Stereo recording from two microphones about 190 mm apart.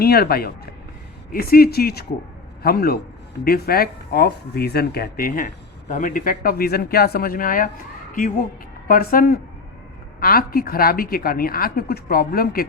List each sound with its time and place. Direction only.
0.0 s a woman's voice: 55° left (ahead or behind)